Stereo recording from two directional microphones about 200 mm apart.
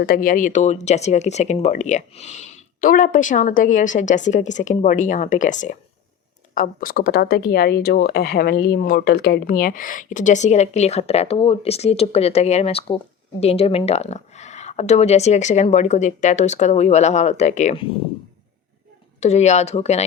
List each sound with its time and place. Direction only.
0.0 s speech: 45° left (ahead or behind)
19.2 s speech: 35° left (ahead or behind)